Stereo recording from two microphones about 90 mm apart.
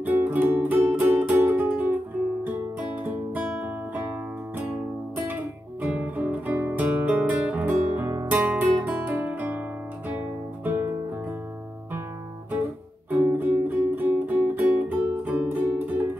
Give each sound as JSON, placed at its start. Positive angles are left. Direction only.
{"t": 0.0, "sound": "music", "side_deg": -20}
{"t": 5.3, "sound": "music", "side_deg": -20}
{"t": 8.4, "sound": "guitar", "side_deg": -20}
{"t": 10.0, "sound": "music", "side_deg": -20}
{"t": 13.1, "sound": "music", "side_deg": -25}